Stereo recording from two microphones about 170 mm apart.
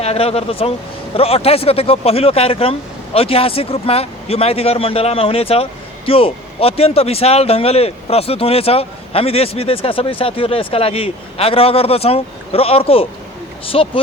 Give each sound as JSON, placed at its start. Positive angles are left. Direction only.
{"t": 0.0, "sound": "a man's voice", "side_deg": 35}